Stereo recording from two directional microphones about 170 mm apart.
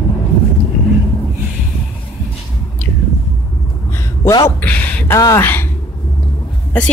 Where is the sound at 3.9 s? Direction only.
15° left (ahead or behind).